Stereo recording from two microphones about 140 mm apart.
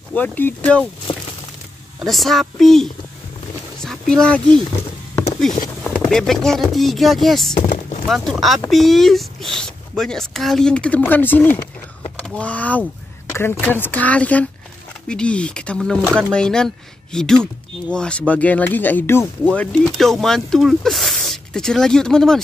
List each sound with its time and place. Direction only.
0.1 s speech: 10° left (ahead or behind)
1.1 s a sound: 35° left (ahead or behind)
2.0 s speech: centre (ahead or behind)
5.9 s speech: centre (ahead or behind)
7.5 s speech: 60° left (ahead or behind)
8.1 s speech: centre (ahead or behind)